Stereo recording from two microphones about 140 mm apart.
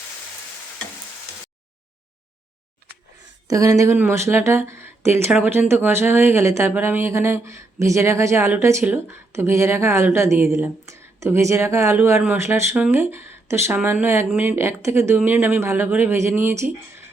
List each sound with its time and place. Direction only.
3.4 s speech: 25° right (ahead or behind)